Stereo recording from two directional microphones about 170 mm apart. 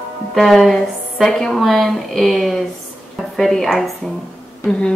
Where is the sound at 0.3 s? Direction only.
Centre (ahead or behind).